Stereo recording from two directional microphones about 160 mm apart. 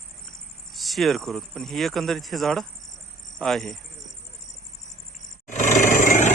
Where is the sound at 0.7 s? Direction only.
Centre (ahead or behind).